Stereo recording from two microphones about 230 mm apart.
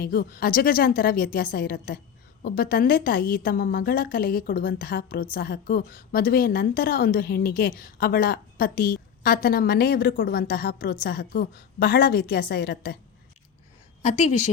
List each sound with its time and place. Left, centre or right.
0.0 s a woman's voice: left
14.0 s a woman's voice: left